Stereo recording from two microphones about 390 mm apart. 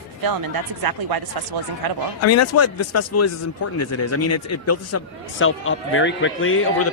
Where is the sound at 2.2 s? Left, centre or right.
Left.